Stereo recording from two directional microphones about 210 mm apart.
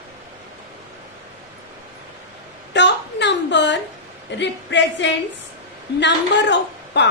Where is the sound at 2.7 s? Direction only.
55° left (ahead or behind).